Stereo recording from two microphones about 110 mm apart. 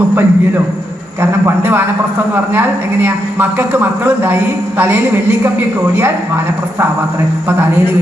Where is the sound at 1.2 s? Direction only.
20° right (ahead or behind).